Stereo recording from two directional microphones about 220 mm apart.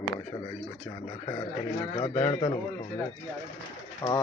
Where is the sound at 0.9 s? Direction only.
25° left (ahead or behind).